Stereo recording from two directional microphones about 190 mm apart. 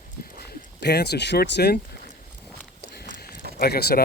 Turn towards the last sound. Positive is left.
turn(degrees=55)  # may be behind; listen again after turning